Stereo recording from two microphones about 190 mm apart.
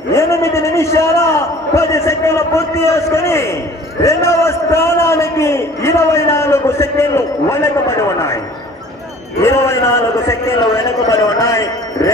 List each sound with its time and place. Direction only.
0.1 s a man's voice: 15° left (ahead or behind)
9.4 s a man's voice: 15° left (ahead or behind)